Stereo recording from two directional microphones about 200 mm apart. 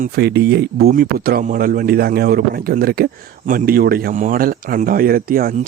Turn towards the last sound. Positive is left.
turn(degrees=-45)  # may be behind; listen again after turning